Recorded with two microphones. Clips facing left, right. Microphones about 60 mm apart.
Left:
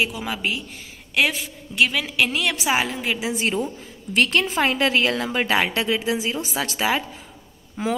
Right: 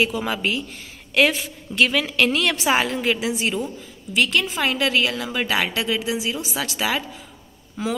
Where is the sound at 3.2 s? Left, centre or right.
Left.